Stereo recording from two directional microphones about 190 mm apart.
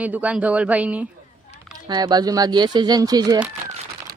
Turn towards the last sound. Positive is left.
turn(degrees=-20)  # may be behind; listen again after turning